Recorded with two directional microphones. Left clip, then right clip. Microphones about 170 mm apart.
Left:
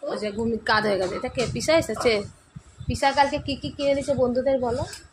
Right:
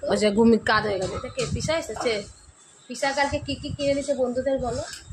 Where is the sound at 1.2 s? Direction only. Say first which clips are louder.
Left 3 dB; 55° left (ahead or behind).